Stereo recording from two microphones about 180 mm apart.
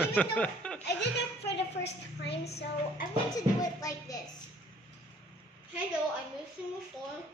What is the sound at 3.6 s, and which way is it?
Music, 20° left (ahead or behind).